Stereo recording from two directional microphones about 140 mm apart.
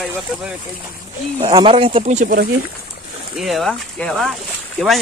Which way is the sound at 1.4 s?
35° right (ahead or behind).